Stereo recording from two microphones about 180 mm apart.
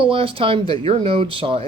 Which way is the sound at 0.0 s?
30° right (ahead or behind).